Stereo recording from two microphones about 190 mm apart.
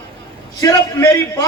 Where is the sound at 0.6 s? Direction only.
15° left (ahead or behind).